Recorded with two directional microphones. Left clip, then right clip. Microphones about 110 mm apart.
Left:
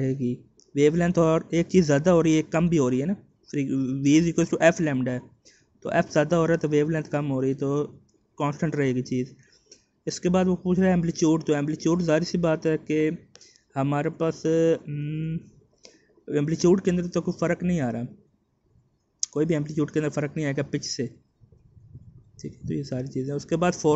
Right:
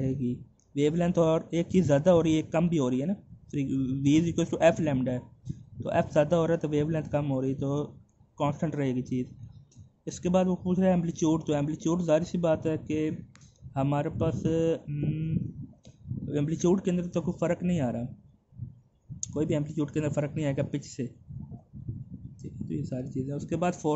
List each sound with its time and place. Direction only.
0.0 s speech: 10° left (ahead or behind)
10.0 s speech: 10° left (ahead or behind)
14.9 s a sound: centre (ahead or behind)
15.8 s speech: 10° left (ahead or behind)
19.1 s speech: 10° left (ahead or behind)
22.4 s speech: 15° left (ahead or behind)